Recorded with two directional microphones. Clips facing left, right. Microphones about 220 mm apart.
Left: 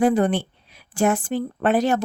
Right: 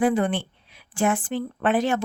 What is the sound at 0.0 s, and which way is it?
A woman's voice, 40° left (ahead or behind).